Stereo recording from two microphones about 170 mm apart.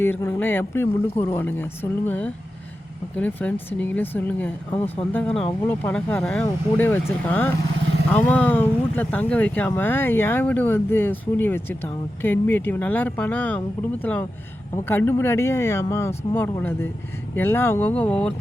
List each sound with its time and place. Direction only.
0.0 s speech: 15° left (ahead or behind)